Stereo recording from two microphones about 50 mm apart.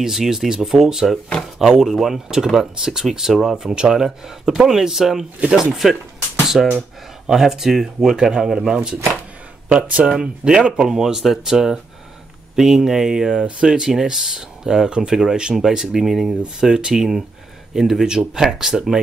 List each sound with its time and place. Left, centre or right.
0.0 s speech: centre
9.7 s speech: right; by 18.9 s centre